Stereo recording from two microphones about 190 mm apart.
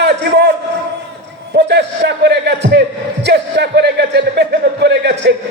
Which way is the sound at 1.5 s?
60° right (ahead or behind).